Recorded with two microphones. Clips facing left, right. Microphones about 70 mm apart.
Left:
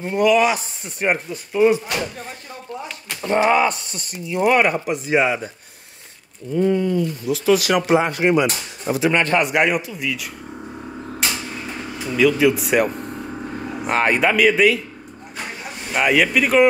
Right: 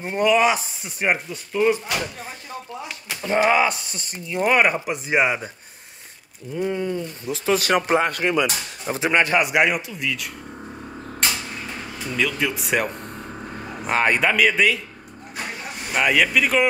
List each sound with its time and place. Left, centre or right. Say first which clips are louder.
0.0 s speech: left 2 dB; right
0.8 s speech: left 2 dB; centre
1.3 s speech: left 7 dB; centre
3.3 s a man's voice: left 2 dB; centre
3.6 s speech: left 2 dB; right
6.5 s speech: left 6 dB; centre
7.2 s speech: left 3 dB; right
8.2 s speech: left 4 dB; left
9.1 s a man's voice: right 2 dB; centre
11.1 s a sound: even; centre
12.0 s speech: left 8 dB; centre
15.3 s vehicle: even; centre